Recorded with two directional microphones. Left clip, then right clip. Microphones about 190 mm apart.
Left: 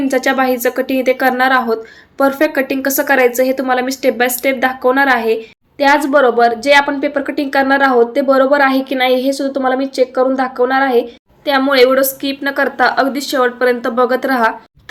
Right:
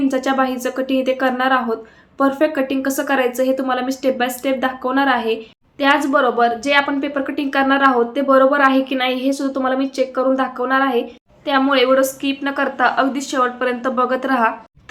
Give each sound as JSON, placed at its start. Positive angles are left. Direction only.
{"t": 0.0, "sound": "a woman's voice", "side_deg": 15}